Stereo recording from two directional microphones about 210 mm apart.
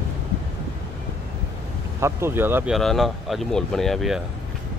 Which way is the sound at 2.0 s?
10° right (ahead or behind).